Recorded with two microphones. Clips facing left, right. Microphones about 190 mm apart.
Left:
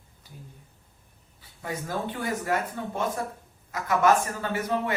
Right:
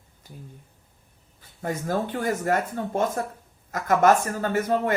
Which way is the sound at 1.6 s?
45° right (ahead or behind).